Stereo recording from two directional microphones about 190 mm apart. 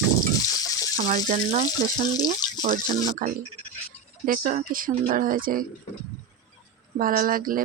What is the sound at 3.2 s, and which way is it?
Speech, 45° right (ahead or behind).